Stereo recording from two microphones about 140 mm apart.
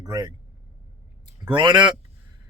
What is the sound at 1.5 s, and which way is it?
Speech, 35° right (ahead or behind).